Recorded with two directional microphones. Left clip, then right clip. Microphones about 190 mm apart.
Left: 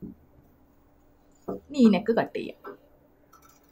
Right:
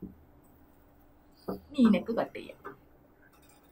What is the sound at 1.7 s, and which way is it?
Speech, 55° left (ahead or behind).